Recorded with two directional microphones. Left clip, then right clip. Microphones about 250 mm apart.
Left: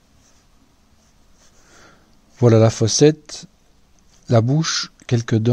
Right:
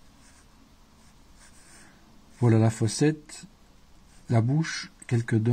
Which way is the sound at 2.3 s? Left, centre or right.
Left.